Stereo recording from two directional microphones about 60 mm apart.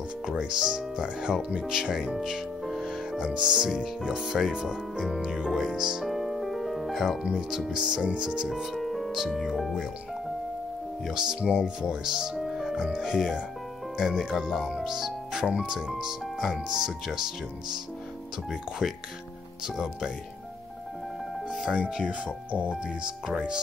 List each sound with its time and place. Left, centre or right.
0.3 s speech: centre
2.2 s music: centre
3.3 s speech: centre
6.0 s music: centre
7.2 s speech: centre
11.1 s speech: centre
11.9 s music: centre
12.8 s speech: centre
18.5 s speech: centre
21.5 s music: centre
22.0 s speech: right